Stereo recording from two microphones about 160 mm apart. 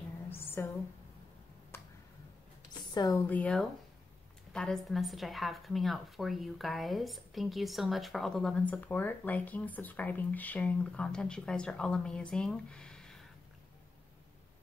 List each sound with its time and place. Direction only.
0.3 s a sound: 15° left (ahead or behind)
2.9 s a woman's voice: 25° left (ahead or behind)
3.3 s a woman's voice: 10° left (ahead or behind)